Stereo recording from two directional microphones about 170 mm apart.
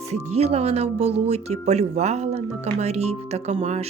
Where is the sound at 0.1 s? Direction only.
40° right (ahead or behind).